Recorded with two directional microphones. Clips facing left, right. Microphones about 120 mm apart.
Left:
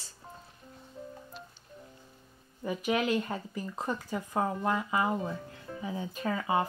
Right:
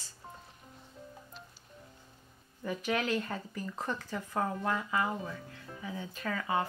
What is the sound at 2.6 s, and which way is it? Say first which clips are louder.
Speech: left 3 dB; 10° left (ahead or behind).